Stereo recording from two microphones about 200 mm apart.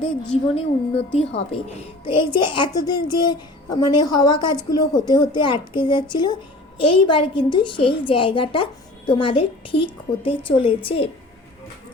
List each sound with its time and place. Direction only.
0.0 s a woman's voice: 30° left (ahead or behind)